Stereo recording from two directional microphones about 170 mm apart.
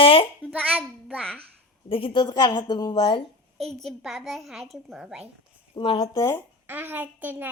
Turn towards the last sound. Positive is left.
turn(degrees=-10)  # may be behind; listen again after turning